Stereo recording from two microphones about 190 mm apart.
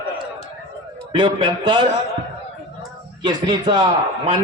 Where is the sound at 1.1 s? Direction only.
25° right (ahead or behind).